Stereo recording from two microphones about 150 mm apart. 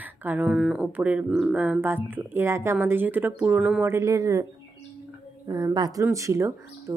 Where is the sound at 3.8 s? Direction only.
20° right (ahead or behind).